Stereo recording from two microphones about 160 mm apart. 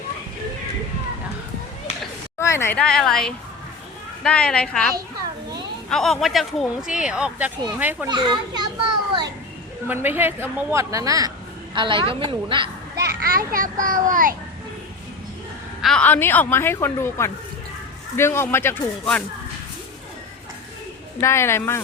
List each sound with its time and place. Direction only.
2.4 s speech: 15° left (ahead or behind)
5.9 s a woman's voice: centre (ahead or behind)
8.0 s a child's voice: 25° right (ahead or behind)
9.9 s a woman's voice: 10° right (ahead or behind); by 12.7 s 30° right (ahead or behind)
13.0 s a child's voice: 75° right (ahead or behind); by 14.3 s 55° right (ahead or behind)
15.8 s speech: 5° left (ahead or behind)
21.2 s speech: 15° left (ahead or behind)